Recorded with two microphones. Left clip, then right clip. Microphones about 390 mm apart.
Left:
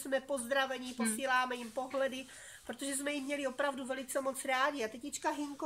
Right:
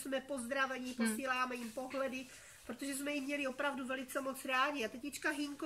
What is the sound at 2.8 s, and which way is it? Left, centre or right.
A woman's voice, centre.